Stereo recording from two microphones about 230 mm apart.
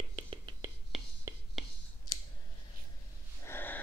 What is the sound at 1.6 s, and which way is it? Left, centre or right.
Clicking, centre.